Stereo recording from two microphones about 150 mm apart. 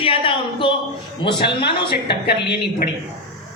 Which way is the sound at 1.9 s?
90° left.